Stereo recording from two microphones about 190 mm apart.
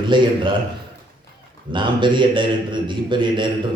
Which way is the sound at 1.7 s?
25° right (ahead or behind).